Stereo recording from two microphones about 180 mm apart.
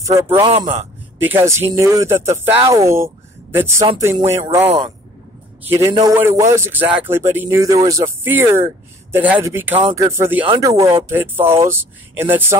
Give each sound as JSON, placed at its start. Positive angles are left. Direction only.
{"t": 0.0, "sound": "a man's voice", "side_deg": -15}
{"t": 0.3, "sound": "a man's voice", "side_deg": -30}
{"t": 1.3, "sound": "speech", "side_deg": -15}
{"t": 4.6, "sound": "speech", "side_deg": -30}
{"t": 5.7, "sound": "speech", "side_deg": -20}